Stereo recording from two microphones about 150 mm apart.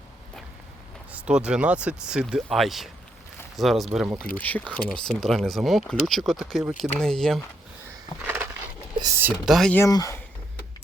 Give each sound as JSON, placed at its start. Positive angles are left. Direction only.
{"t": 1.1, "sound": "speech", "side_deg": -5}
{"t": 4.4, "sound": "speech", "side_deg": 10}
{"t": 8.2, "sound": "a sound", "side_deg": -15}
{"t": 9.5, "sound": "speech", "side_deg": 0}
{"t": 9.7, "sound": "speech", "side_deg": 20}